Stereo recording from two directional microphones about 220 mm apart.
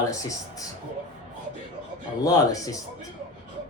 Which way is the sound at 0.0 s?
15° left (ahead or behind).